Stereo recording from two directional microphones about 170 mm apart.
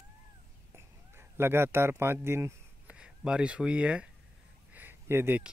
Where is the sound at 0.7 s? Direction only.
15° right (ahead or behind).